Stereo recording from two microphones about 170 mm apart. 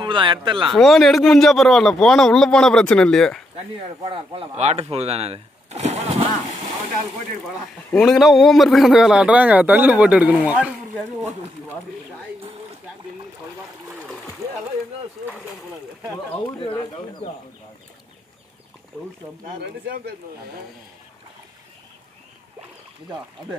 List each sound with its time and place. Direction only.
0.0 s speech: 30° right (ahead or behind)
0.7 s a man's voice: centre (ahead or behind)
4.0 s speech: 30° right (ahead or behind)
7.9 s a man's voice: centre (ahead or behind)
16.6 s speech: 30° left (ahead or behind)